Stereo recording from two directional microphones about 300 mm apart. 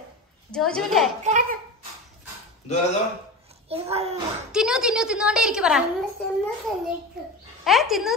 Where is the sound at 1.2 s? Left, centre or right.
Right.